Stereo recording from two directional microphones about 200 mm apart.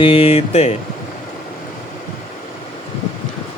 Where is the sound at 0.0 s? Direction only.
30° left (ahead or behind).